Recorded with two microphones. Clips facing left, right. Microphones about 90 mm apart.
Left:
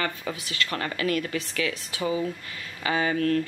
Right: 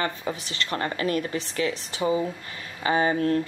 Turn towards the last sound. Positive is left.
turn(degrees=-25)  # may be behind; listen again after turning